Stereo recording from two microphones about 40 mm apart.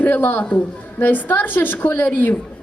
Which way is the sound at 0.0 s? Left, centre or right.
Left.